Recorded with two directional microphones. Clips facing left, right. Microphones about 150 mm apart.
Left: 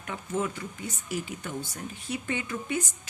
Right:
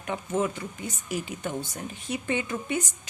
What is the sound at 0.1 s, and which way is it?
Speech, 25° right (ahead or behind).